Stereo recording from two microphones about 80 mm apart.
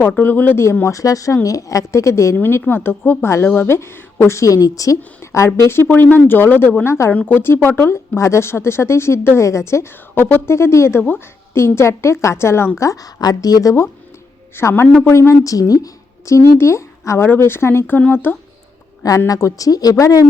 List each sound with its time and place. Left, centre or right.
0.2 s speech: left
0.6 s a woman's voice: left
2.3 s speech: left
4.4 s a woman's voice: left
5.6 s speech: left
7.1 s a woman's voice: left
10.2 s speech: left
10.5 s a woman's voice: left
12.8 s a woman's voice: left
14.5 s a woman's voice: left
19.3 s a woman's voice: left